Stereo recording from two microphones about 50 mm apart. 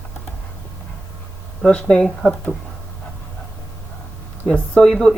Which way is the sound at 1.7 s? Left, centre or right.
Centre.